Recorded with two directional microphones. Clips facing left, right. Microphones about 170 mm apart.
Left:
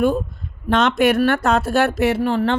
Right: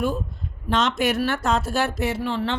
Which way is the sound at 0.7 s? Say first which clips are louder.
Left 6 dB; 60° left (ahead or behind).